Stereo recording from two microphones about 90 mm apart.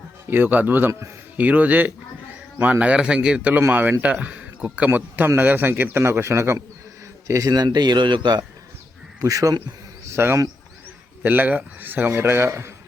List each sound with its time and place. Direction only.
0.3 s a man's voice: 20° right (ahead or behind)
1.4 s a man's voice: 15° right (ahead or behind); by 8.4 s 50° right (ahead or behind)
9.2 s speech: 40° right (ahead or behind)
10.1 s a man's voice: 30° right (ahead or behind)